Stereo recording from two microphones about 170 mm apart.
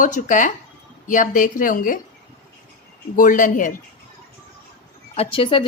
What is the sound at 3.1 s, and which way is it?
Speech, 50° left (ahead or behind).